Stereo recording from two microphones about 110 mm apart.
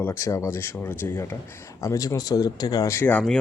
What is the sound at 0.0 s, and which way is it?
Speech, 20° left (ahead or behind).